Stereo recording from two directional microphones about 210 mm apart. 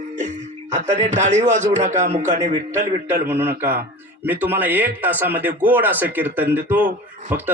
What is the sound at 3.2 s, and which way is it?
A man's voice, 10° right (ahead or behind).